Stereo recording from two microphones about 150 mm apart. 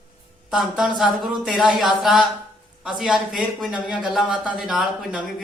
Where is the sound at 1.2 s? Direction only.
Centre (ahead or behind).